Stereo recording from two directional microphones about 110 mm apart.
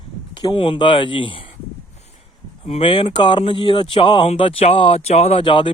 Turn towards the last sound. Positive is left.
turn(degrees=50)  # may be behind; listen again after turning